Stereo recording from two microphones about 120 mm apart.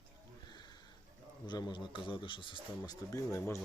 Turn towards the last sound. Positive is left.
turn(degrees=25)  # may be behind; listen again after turning